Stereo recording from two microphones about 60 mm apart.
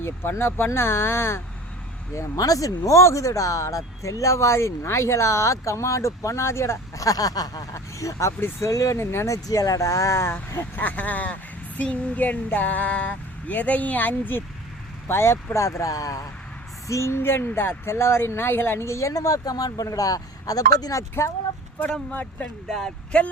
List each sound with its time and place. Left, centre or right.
0.0 s speech: left
2.1 s speech: left
7.0 s speech: left
8.4 s speech: left
8.7 s speech: left
9.0 s speech: left
9.3 s speech: left
10.8 s speech: left
15.0 s speech: left
15.6 s speech: left
16.9 s speech: left
19.1 s speech: left
22.1 s speech: left
22.7 s speech: centre